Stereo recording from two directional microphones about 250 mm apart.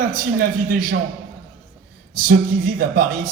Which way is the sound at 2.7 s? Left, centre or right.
Right.